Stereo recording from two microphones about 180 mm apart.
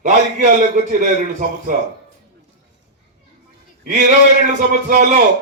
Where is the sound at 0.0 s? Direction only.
45° right (ahead or behind).